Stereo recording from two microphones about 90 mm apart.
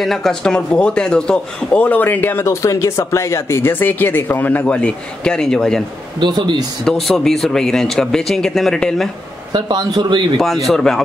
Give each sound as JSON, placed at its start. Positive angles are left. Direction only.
{"t": 0.0, "sound": "a man's voice", "side_deg": 5}
{"t": 2.4, "sound": "speech", "side_deg": 35}
{"t": 6.1, "sound": "a man's voice", "side_deg": -55}
{"t": 6.9, "sound": "a man's voice", "side_deg": 5}
{"t": 9.5, "sound": "a man's voice", "side_deg": -55}
{"t": 10.3, "sound": "a man's voice", "side_deg": 5}